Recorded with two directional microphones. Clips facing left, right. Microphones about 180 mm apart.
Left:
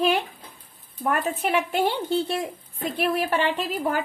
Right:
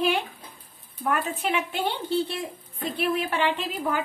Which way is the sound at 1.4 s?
45° left (ahead or behind).